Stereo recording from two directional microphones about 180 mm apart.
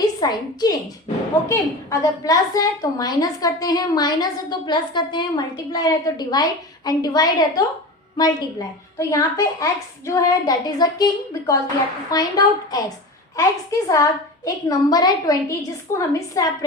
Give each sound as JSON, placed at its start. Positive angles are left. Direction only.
{"t": 0.0, "sound": "a woman's voice", "side_deg": 20}